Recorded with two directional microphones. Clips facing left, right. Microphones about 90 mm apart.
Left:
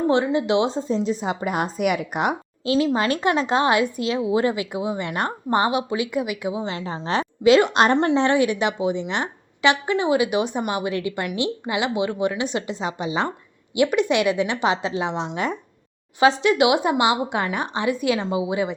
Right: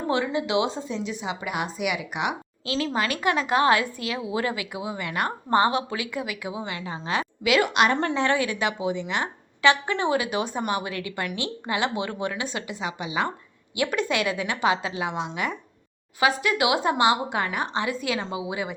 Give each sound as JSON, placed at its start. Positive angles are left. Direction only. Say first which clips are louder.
{"t": 0.1, "sound": "a woman's voice", "louder": "left 2 dB", "side_deg": 30}
{"t": 2.6, "sound": "speech", "louder": "left 6 dB", "side_deg": 20}
{"t": 13.7, "sound": "speech", "louder": "left 6 dB", "side_deg": 20}